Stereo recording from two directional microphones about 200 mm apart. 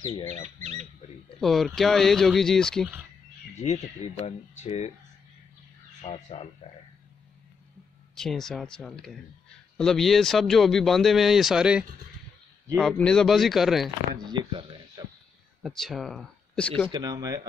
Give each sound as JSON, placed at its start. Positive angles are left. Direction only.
{"t": 0.0, "sound": "speech", "side_deg": 30}
{"t": 0.6, "sound": "speech", "side_deg": -35}
{"t": 1.4, "sound": "speech", "side_deg": 0}
{"t": 3.5, "sound": "speech", "side_deg": 30}
{"t": 5.9, "sound": "speech", "side_deg": 35}
{"t": 8.2, "sound": "speech", "side_deg": 0}
{"t": 14.1, "sound": "speech", "side_deg": -25}
{"t": 15.6, "sound": "speech", "side_deg": 0}
{"t": 16.9, "sound": "speech", "side_deg": -20}